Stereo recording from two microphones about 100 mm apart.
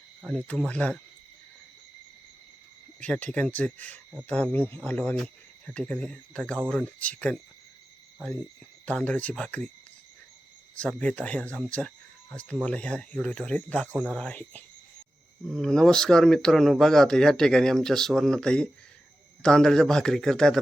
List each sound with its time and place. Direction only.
0.3 s speech: 10° left (ahead or behind)
3.0 s speech: 15° left (ahead or behind)
5.1 s speech: 10° left (ahead or behind)
8.9 s speech: 10° left (ahead or behind)
10.8 s speech: 10° left (ahead or behind)